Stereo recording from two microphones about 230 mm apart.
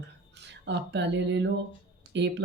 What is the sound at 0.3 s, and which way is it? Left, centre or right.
Speech, right.